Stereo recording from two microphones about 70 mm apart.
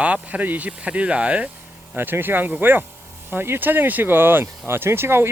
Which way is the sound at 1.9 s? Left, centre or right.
Right.